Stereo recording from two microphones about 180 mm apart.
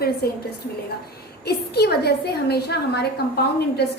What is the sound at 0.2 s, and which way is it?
Speech, 60° left (ahead or behind).